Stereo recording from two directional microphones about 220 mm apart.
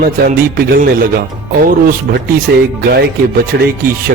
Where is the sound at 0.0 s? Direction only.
40° right (ahead or behind).